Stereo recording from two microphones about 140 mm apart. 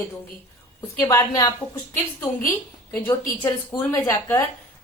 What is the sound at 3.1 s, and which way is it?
Speech, 20° left (ahead or behind).